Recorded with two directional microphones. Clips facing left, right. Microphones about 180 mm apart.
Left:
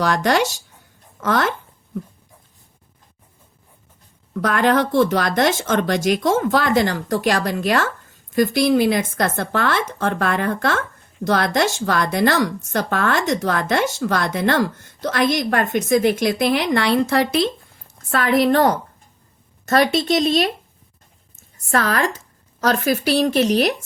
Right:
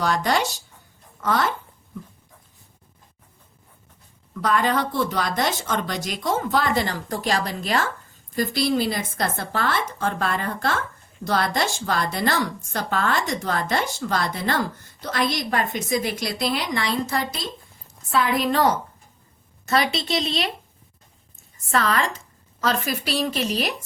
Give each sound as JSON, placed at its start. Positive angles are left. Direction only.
{"t": 0.0, "sound": "speech", "side_deg": 75}
{"t": 4.4, "sound": "speech", "side_deg": 65}
{"t": 9.2, "sound": "a woman's voice", "side_deg": 55}
{"t": 18.1, "sound": "speech", "side_deg": 80}
{"t": 19.6, "sound": "speech", "side_deg": 50}
{"t": 21.7, "sound": "speech", "side_deg": 45}
{"t": 22.6, "sound": "a woman's voice", "side_deg": 55}